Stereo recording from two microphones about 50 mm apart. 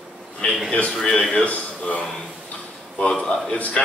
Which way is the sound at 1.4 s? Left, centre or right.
Left.